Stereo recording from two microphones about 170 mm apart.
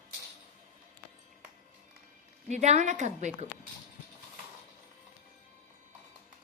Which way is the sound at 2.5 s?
40° right (ahead or behind).